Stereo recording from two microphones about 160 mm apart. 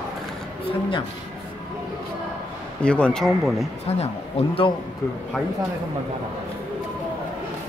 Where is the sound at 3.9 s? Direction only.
40° left (ahead or behind).